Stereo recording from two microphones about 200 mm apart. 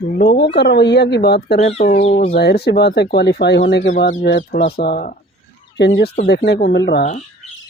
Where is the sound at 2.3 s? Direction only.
55° left (ahead or behind).